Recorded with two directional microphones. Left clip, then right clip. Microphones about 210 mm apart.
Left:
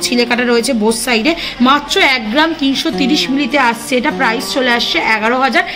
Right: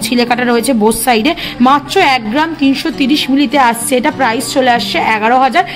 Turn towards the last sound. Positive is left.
turn(degrees=-45)  # may be behind; listen again after turning